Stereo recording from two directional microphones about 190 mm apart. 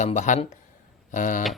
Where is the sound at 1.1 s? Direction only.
40° left (ahead or behind).